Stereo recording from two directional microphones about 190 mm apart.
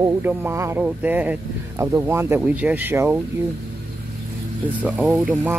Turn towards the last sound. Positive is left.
turn(degrees=-5)  # may be behind; listen again after turning